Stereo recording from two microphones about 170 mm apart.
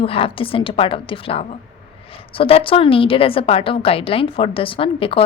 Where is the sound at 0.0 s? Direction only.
35° left (ahead or behind).